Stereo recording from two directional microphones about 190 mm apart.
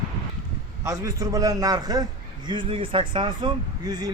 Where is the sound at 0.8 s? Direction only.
20° right (ahead or behind).